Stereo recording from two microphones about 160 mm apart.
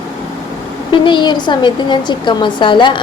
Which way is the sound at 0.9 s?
30° left (ahead or behind).